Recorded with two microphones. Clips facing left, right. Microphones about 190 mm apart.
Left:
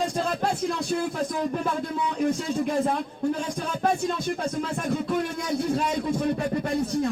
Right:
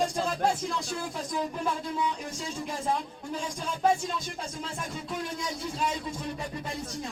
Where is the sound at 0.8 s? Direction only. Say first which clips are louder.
Left 8 dB; 60° left (ahead or behind).